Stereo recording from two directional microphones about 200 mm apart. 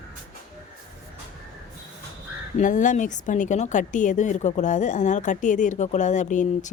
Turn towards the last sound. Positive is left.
turn(degrees=40)  # may be behind; listen again after turning